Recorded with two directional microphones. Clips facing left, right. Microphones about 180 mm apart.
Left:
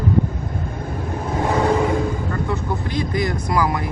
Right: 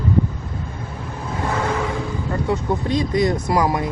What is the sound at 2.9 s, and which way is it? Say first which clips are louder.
Speech: right 4 dB; 25° right (ahead or behind).